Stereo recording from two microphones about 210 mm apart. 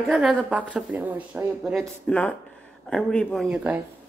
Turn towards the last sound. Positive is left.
turn(degrees=-5)  # may be behind; listen again after turning